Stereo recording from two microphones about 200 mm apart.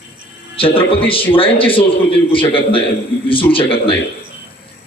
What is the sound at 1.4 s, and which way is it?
A man's voice, 25° left (ahead or behind).